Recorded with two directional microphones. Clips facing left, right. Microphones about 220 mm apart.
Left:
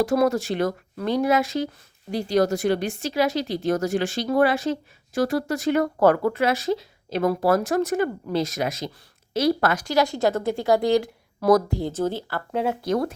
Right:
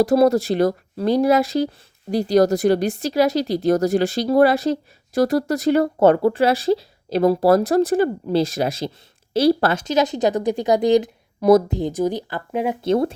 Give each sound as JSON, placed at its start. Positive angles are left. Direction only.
{"t": 0.0, "sound": "speech", "side_deg": -35}
{"t": 12.9, "sound": "speech", "side_deg": -25}